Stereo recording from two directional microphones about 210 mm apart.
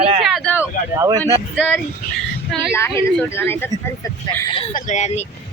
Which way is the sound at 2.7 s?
10° left (ahead or behind).